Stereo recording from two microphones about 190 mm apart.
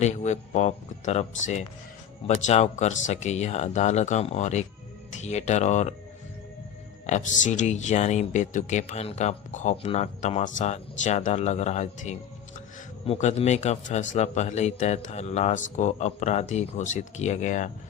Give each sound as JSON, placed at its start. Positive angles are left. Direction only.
{"t": 0.0, "sound": "speech", "side_deg": 35}
{"t": 7.1, "sound": "speech", "side_deg": 40}